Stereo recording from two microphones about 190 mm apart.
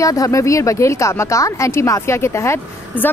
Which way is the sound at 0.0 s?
15° left (ahead or behind).